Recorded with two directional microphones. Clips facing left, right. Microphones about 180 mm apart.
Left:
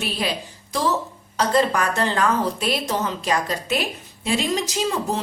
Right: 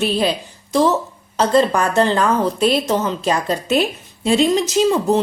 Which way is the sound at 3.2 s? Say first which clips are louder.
Right 4 dB; 30° right (ahead or behind).